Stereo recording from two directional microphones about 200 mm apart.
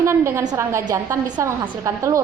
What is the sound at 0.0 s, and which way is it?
A woman's voice, 15° right (ahead or behind).